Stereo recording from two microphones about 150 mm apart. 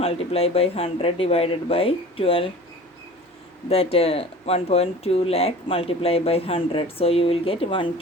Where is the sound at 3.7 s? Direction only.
40° left (ahead or behind).